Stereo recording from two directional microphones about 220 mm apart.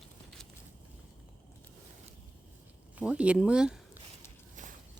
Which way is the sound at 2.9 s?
5° right (ahead or behind).